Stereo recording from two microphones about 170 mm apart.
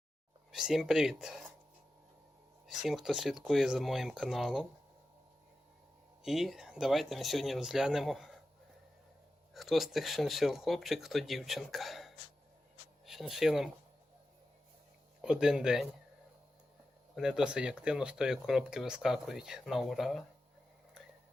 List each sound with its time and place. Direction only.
0.5 s speech: 5° right (ahead or behind)
2.6 s speech: centre (ahead or behind)
6.2 s speech: centre (ahead or behind)
9.6 s speech: centre (ahead or behind)
15.2 s speech: 5° right (ahead or behind)
17.2 s speech: 5° right (ahead or behind)